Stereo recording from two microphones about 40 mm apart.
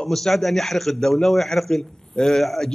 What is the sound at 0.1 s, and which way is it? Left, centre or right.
A man's voice, centre.